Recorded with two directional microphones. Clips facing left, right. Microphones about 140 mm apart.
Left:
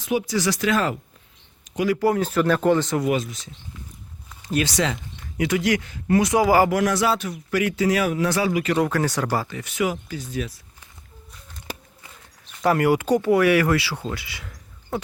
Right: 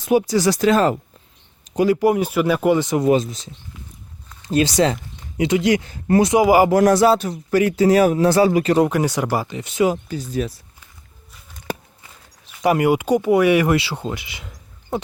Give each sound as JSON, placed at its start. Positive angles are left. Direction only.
{"t": 0.0, "sound": "speech", "side_deg": -45}
{"t": 0.3, "sound": "a man's voice", "side_deg": -30}
{"t": 2.0, "sound": "speech", "side_deg": -15}
{"t": 3.0, "sound": "speech", "side_deg": -30}
{"t": 5.9, "sound": "a man's voice", "side_deg": -35}
{"t": 6.3, "sound": "speech", "side_deg": -20}
{"t": 6.7, "sound": "a man's voice", "side_deg": -35}
{"t": 8.9, "sound": "speech", "side_deg": -15}
{"t": 12.6, "sound": "speech", "side_deg": -20}